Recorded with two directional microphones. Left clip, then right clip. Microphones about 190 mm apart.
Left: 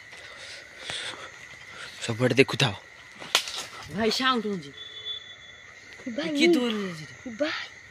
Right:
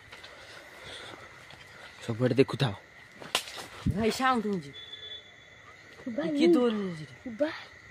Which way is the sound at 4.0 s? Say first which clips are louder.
Left 3 dB; 35° right (ahead or behind).